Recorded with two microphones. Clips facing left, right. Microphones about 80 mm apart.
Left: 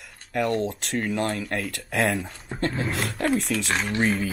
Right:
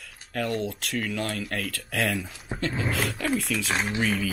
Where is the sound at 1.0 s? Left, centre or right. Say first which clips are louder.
Left 6 dB; left.